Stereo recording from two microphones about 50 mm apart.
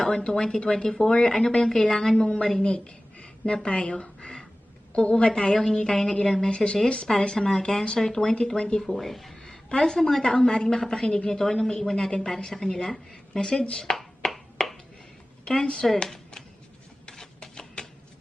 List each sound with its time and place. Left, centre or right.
0.2 s a woman's voice: centre
9.0 s speech: centre
9.4 s a woman's voice: centre
14.2 s a sound: centre
15.4 s speech: centre
17.1 s printer: centre